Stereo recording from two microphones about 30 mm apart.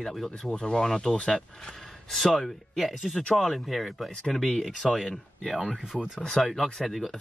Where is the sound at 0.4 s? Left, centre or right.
Left.